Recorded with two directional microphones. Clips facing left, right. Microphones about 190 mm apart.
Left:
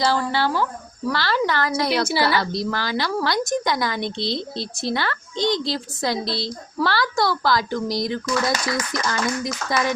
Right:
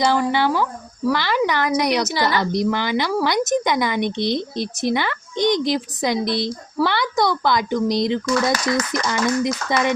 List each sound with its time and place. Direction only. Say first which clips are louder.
0.0 s a woman's voice: right 3 dB; 15° right (ahead or behind)